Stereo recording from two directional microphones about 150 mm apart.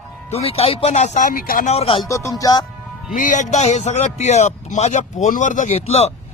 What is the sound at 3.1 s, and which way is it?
Speech, 55° left (ahead or behind).